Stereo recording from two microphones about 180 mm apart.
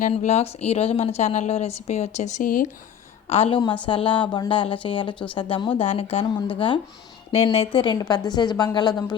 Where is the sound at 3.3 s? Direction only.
35° left (ahead or behind).